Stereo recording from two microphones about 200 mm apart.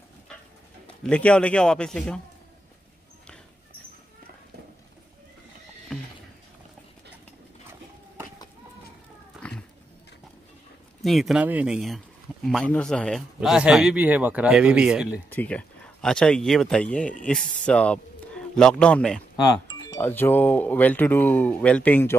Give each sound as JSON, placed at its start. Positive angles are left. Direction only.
{"t": 1.0, "sound": "speech", "side_deg": 5}
{"t": 9.4, "sound": "cat", "side_deg": 5}
{"t": 11.0, "sound": "speech", "side_deg": 0}
{"t": 15.2, "sound": "speech", "side_deg": 10}
{"t": 19.3, "sound": "music", "side_deg": 20}
{"t": 20.0, "sound": "speech", "side_deg": 10}